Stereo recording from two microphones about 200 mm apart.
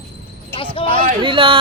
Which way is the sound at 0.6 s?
25° left (ahead or behind).